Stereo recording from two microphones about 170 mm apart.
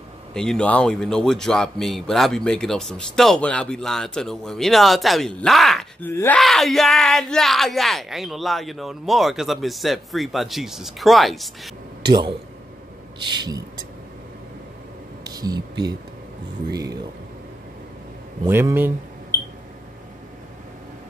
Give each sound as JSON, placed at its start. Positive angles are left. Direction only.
{"t": 0.3, "sound": "a man's voice", "side_deg": 5}
{"t": 12.1, "sound": "speech", "side_deg": -25}
{"t": 15.2, "sound": "speech", "side_deg": -20}
{"t": 18.5, "sound": "speech", "side_deg": -15}